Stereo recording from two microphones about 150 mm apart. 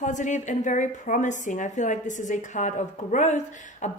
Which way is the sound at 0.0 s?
55° left (ahead or behind).